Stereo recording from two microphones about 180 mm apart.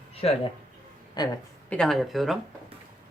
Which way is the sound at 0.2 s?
35° left (ahead or behind).